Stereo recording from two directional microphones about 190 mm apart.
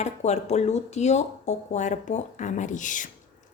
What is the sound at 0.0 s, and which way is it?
Speech, 35° left (ahead or behind).